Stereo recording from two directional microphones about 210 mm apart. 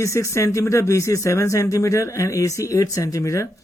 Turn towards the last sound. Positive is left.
turn(degrees=15)  # may be behind; listen again after turning